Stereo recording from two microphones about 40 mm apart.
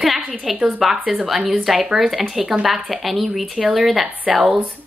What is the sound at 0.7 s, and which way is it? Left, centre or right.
Speech, centre.